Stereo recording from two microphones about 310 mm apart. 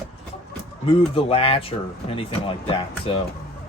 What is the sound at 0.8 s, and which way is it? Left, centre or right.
Speech, centre.